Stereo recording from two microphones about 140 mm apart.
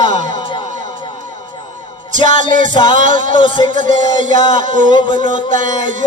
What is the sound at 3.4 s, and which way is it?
Music, 35° left (ahead or behind).